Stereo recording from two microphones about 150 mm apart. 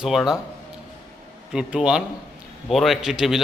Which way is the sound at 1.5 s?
5° right (ahead or behind).